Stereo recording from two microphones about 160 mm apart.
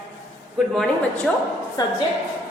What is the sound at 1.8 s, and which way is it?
Speech, 25° left (ahead or behind).